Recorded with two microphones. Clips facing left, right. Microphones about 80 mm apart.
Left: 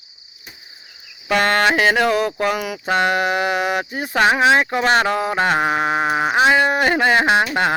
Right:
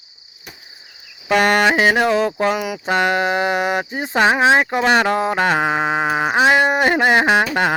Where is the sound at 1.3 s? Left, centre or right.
Centre.